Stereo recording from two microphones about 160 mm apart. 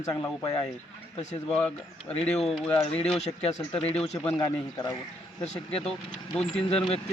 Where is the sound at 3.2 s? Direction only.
40° left (ahead or behind).